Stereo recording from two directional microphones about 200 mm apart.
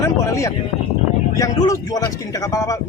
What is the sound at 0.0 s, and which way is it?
Speech, 15° left (ahead or behind).